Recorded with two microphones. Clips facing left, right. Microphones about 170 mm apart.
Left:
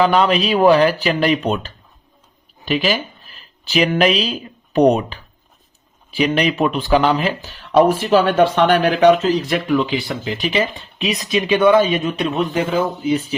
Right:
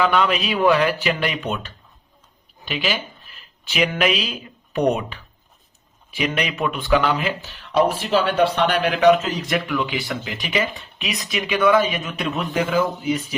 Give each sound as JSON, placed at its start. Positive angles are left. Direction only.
{"t": 0.0, "sound": "speech", "side_deg": 35}
{"t": 2.6, "sound": "speech", "side_deg": 45}